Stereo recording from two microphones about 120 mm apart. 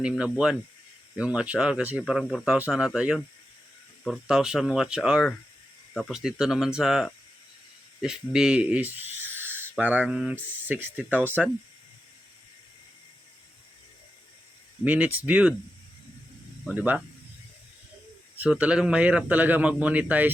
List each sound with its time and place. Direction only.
0.0 s a man's voice: 5° right (ahead or behind)
10.3 s a man's voice: 20° right (ahead or behind)
14.8 s a man's voice: 10° right (ahead or behind)
16.7 s a man's voice: 15° right (ahead or behind)
18.4 s a man's voice: 10° right (ahead or behind)